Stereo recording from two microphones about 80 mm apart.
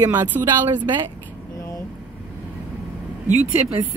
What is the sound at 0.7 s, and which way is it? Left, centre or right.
Speech, right.